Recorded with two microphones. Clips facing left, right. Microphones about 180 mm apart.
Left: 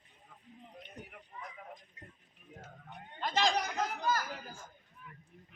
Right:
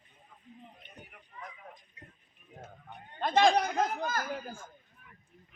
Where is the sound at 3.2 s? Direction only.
55° right (ahead or behind).